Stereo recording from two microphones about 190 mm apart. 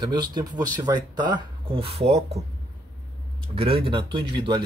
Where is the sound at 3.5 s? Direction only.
30° right (ahead or behind).